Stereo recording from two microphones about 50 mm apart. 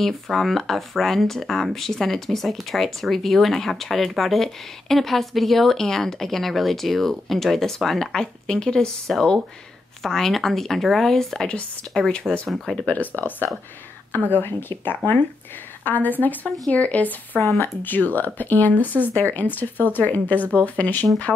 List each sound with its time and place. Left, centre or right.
0.0 s speech: centre
12.4 s speech: centre
12.8 s speech: left